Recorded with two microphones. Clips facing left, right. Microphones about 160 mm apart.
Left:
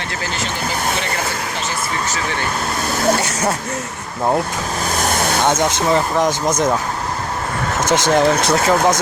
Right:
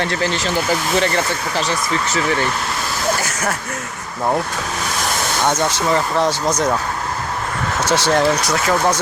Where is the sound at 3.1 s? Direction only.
20° left (ahead or behind).